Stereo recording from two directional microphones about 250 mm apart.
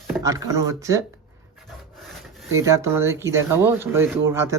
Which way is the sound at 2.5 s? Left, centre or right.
Centre.